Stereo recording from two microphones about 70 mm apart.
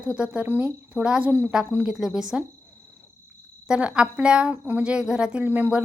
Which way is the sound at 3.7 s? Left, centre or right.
Centre.